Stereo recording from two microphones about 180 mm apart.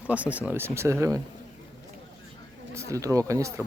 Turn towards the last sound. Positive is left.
turn(degrees=-15)  # may be behind; listen again after turning